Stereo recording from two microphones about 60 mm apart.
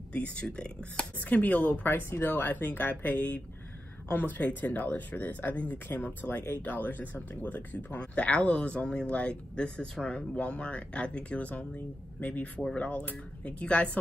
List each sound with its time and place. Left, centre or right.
0.1 s speech: left
1.4 s speech: left